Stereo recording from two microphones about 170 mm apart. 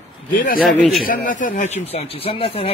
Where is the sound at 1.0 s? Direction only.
55° left (ahead or behind); by 2.7 s 35° left (ahead or behind).